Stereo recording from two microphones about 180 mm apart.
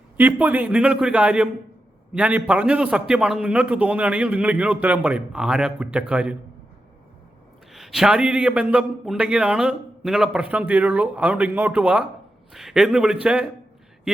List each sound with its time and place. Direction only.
0.2 s a man's voice: 10° right (ahead or behind)
7.7 s a man's voice: centre (ahead or behind)